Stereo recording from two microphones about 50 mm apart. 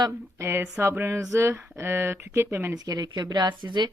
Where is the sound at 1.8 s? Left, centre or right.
Right.